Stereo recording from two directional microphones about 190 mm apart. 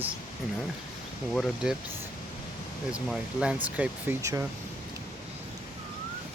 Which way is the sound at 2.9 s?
5° right (ahead or behind).